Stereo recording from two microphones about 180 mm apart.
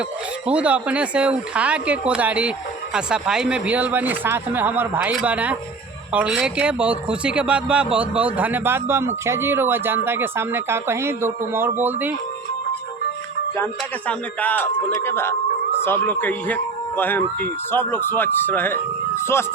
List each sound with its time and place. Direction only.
0.4 s a man's voice: 5° right (ahead or behind)
14.1 s speech: 10° left (ahead or behind)